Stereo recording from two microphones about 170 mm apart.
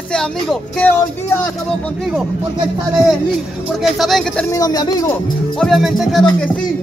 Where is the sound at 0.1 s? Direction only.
5° left (ahead or behind).